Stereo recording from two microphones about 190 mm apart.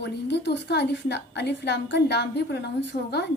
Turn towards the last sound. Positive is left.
turn(degrees=40)  # may be behind; listen again after turning